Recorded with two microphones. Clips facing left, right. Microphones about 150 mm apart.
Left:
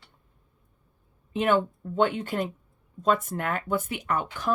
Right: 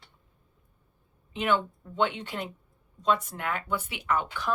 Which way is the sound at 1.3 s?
45° left (ahead or behind).